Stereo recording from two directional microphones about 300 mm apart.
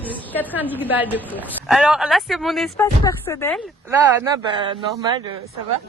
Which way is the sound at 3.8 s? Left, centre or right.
Centre.